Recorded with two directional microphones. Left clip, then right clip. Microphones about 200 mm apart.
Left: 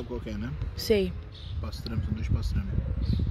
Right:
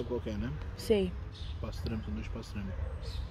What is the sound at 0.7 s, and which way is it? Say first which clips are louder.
Speech: left 4 dB; 15° left (ahead or behind).